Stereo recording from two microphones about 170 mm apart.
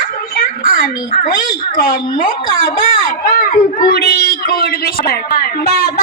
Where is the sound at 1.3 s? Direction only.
55° left (ahead or behind).